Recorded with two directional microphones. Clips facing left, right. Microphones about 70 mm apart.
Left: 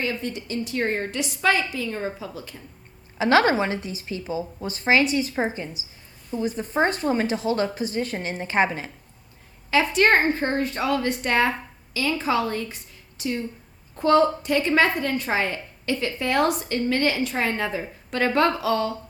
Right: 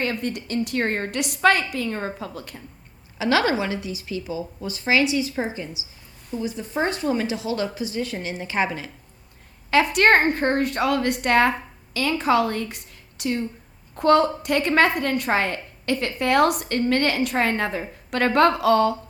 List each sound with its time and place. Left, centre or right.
0.0 s a woman's voice: right
3.2 s a woman's voice: left
9.6 s a woman's voice: right